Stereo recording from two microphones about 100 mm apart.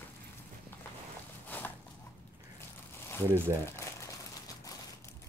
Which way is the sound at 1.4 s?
20° left (ahead or behind).